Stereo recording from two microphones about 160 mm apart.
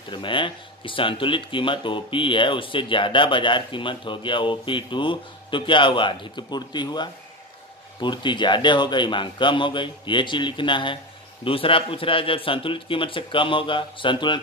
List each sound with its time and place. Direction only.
0.1 s a man's voice: 30° left (ahead or behind)